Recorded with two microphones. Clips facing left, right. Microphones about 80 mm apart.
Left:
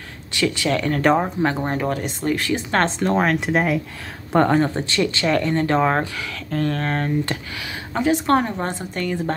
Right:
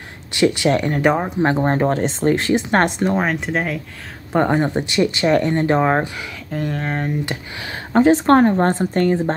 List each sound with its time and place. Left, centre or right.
0.3 s speech: right
1.0 s speech: centre
1.4 s speech: right
3.3 s speech: centre
4.4 s speech: centre
7.6 s a woman's voice: right